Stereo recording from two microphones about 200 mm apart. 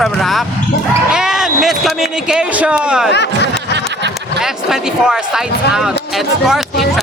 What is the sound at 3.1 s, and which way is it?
Speech, 60° left (ahead or behind).